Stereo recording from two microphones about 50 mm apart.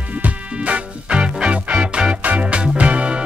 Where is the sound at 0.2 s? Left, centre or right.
Right.